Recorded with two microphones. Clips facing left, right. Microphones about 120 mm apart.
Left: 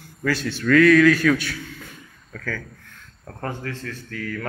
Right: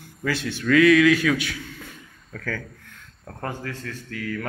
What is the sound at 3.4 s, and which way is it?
A man's voice, 15° right (ahead or behind).